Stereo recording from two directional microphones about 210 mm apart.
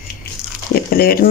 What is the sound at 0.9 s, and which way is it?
Speech, 45° left (ahead or behind).